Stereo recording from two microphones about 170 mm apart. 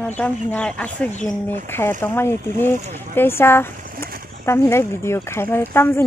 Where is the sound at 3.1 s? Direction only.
15° left (ahead or behind).